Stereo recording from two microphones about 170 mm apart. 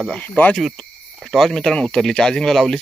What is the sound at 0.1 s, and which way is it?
Speech, 10° left (ahead or behind).